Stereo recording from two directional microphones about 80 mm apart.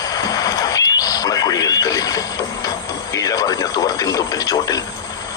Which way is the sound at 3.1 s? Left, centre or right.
Left.